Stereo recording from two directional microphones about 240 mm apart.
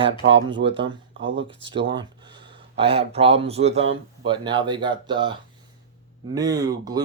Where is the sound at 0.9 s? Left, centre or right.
Right.